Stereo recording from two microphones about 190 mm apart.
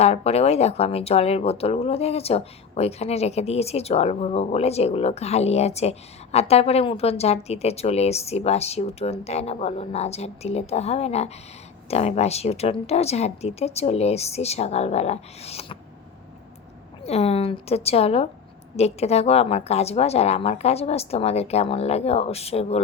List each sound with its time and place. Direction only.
0.0 s speech: 35° left (ahead or behind)
17.1 s speech: 35° left (ahead or behind)